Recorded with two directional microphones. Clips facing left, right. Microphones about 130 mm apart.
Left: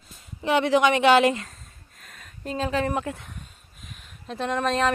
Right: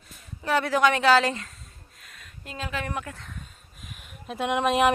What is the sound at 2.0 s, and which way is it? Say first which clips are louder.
Speech: left 6 dB; 45° left (ahead or behind).